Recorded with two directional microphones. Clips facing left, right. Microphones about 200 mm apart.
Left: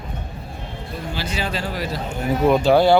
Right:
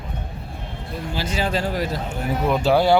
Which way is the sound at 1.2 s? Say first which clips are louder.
Right 4 dB; 45° right (ahead or behind).